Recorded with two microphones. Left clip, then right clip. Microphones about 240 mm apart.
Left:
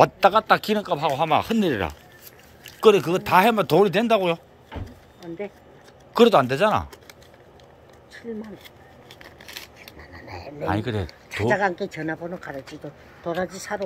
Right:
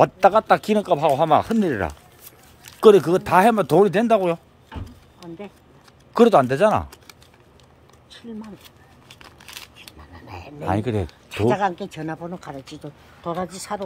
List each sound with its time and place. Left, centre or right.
0.0 s speech: right
2.8 s speech: right
6.1 s speech: right
10.6 s speech: right
12.1 s speech: right